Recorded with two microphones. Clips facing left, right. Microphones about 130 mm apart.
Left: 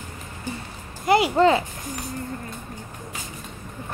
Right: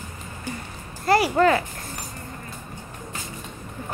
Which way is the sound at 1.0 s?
20° left (ahead or behind).